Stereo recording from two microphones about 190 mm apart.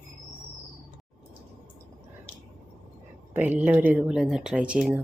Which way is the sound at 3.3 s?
10° right (ahead or behind).